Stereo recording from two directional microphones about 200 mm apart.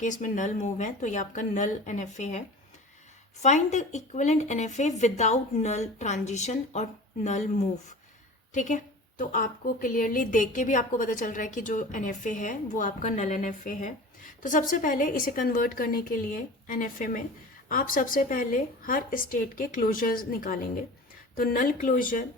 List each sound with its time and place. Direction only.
0.0 s a woman's voice: 40° left (ahead or behind)
3.4 s a woman's voice: 35° left (ahead or behind)